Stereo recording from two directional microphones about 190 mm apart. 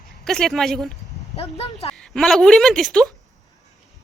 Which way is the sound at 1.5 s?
35° left (ahead or behind).